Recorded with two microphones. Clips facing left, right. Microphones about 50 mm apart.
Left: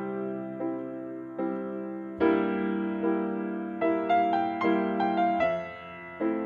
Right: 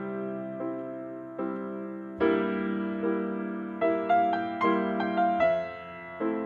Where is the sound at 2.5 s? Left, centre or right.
Left.